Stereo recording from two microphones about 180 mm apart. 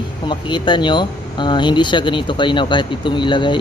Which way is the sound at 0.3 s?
25° left (ahead or behind).